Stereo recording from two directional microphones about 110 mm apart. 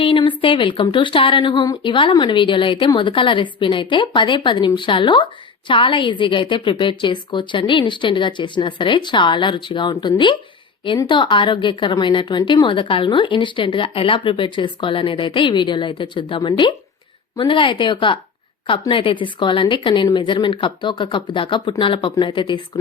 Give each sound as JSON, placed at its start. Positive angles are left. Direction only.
{"t": 0.0, "sound": "speech", "side_deg": 50}